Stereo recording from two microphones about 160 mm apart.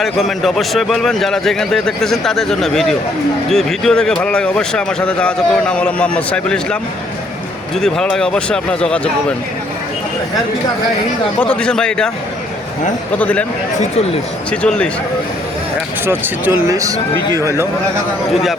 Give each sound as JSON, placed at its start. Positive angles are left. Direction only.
{"t": 0.0, "sound": "speech", "side_deg": 0}
{"t": 7.8, "sound": "speech", "side_deg": 5}
{"t": 11.3, "sound": "speech", "side_deg": 5}
{"t": 13.1, "sound": "speech", "side_deg": 10}
{"t": 14.5, "sound": "speech", "side_deg": 5}
{"t": 16.0, "sound": "speech", "side_deg": -15}